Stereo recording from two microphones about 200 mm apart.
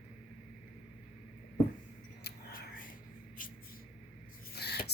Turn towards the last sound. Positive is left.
turn(degrees=55)  # may be behind; listen again after turning